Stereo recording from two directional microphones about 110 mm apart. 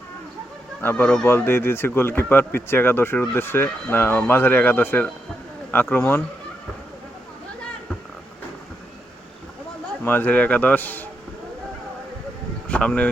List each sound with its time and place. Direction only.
0.8 s a man's voice: 15° left (ahead or behind)
10.0 s a man's voice: 15° left (ahead or behind)
12.6 s a sound: 10° left (ahead or behind)